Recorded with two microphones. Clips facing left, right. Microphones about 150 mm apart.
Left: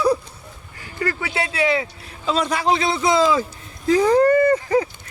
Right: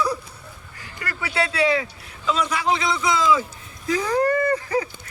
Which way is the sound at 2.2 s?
35° left (ahead or behind).